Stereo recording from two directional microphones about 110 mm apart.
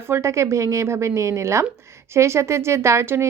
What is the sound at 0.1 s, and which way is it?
A woman's voice, 25° right (ahead or behind).